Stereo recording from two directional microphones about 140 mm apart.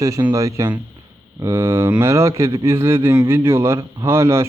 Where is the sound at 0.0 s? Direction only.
30° right (ahead or behind).